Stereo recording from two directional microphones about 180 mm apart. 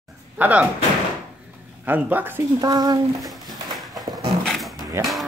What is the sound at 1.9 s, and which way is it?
Speech, 10° right (ahead or behind).